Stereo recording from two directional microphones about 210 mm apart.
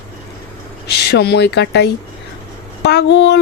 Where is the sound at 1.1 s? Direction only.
50° left (ahead or behind).